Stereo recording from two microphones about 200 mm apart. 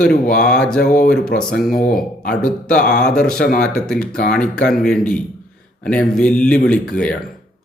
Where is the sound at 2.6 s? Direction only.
5° left (ahead or behind).